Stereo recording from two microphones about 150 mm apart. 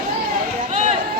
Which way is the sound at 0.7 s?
45° right (ahead or behind).